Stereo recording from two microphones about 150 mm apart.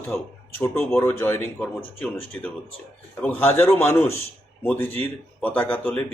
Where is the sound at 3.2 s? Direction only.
10° left (ahead or behind).